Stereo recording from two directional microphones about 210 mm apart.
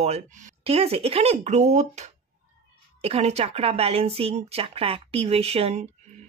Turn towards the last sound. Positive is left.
turn(degrees=-30)  # may be behind; listen again after turning